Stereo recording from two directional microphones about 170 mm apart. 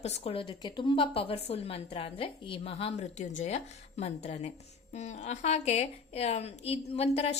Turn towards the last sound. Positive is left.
turn(degrees=40)  # may be behind; listen again after turning